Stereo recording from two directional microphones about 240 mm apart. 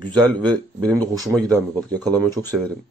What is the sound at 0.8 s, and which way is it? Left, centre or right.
Speech, centre.